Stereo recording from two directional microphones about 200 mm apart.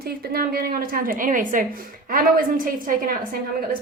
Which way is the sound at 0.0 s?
50° right (ahead or behind).